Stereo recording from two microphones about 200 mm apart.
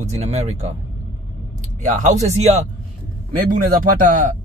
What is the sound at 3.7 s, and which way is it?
Speech, 45° right (ahead or behind).